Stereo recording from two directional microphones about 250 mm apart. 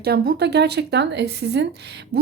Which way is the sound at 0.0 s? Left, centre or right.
Right.